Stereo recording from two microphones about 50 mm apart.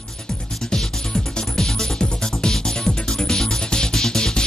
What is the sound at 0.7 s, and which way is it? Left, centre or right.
Music, centre.